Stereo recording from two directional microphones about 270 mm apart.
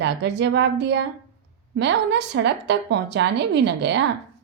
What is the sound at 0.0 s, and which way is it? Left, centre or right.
A woman's voice, right.